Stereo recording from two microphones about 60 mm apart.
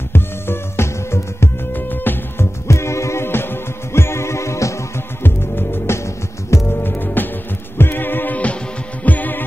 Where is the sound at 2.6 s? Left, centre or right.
Left.